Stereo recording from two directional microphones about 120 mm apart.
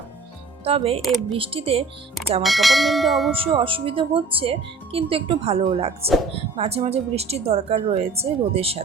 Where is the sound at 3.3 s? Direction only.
50° right (ahead or behind).